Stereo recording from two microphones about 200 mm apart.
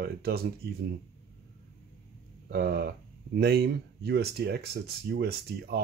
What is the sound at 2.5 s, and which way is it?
Speech, 50° right (ahead or behind).